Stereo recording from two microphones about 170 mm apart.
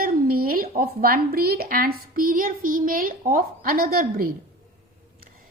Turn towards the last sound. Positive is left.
turn(degrees=-60)  # may be behind; listen again after turning